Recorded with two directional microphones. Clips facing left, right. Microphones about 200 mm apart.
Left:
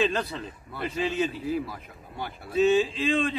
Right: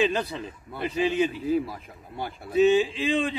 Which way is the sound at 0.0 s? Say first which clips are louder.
Right 2 dB; 10° right (ahead or behind).